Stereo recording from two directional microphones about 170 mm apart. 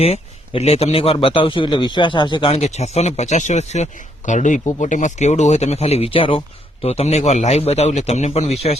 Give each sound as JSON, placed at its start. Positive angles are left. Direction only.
{"t": 0.0, "sound": "a man's voice", "side_deg": 35}